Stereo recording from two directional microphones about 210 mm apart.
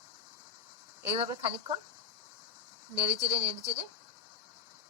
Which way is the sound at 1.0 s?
25° right (ahead or behind).